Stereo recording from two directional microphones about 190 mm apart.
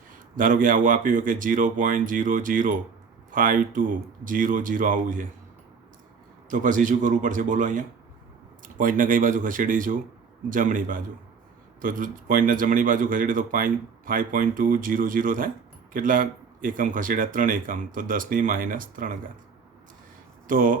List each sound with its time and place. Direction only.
0.1 s speech: 45° right (ahead or behind)
6.5 s speech: 45° right (ahead or behind)
20.5 s speech: 45° right (ahead or behind)